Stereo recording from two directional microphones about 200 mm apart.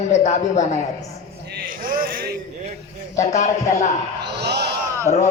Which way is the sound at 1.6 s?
45° right (ahead or behind).